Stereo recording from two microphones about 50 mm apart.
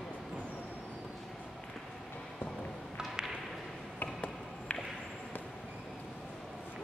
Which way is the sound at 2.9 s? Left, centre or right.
Centre.